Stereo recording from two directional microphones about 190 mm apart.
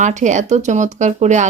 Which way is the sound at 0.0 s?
40° right (ahead or behind).